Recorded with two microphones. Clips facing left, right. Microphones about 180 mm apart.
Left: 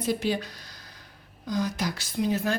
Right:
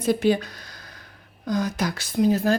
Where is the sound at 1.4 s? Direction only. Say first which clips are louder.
Right 4 dB; 55° right (ahead or behind); by 2.5 s 35° right (ahead or behind).